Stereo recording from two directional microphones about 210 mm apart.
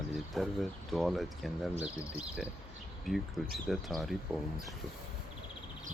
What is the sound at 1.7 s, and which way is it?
Speech, 30° right (ahead or behind).